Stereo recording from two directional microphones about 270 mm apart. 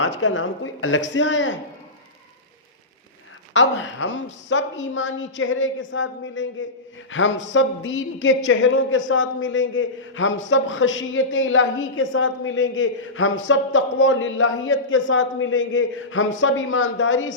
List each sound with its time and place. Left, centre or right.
0.0 s a man's voice: left
3.5 s a man's voice: left